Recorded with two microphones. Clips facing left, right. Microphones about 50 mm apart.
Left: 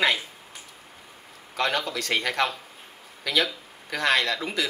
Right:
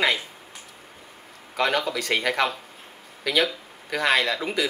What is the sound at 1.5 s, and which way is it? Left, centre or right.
Speech, centre.